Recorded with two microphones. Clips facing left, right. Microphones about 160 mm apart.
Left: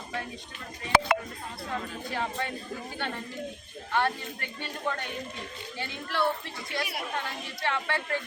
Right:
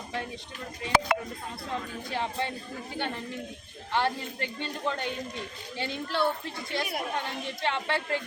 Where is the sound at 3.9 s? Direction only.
25° right (ahead or behind).